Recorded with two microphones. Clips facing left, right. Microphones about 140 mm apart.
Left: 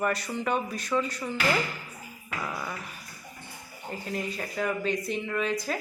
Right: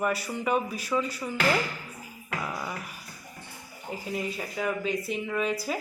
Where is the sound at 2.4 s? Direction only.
10° right (ahead or behind).